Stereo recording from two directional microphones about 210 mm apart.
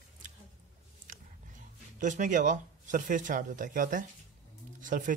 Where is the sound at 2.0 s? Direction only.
35° right (ahead or behind).